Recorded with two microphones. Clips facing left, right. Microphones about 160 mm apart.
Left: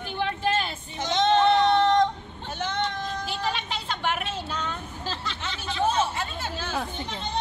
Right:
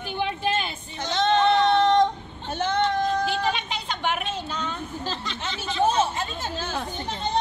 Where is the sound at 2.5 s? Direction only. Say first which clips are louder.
Right 6 dB; 40° right (ahead or behind).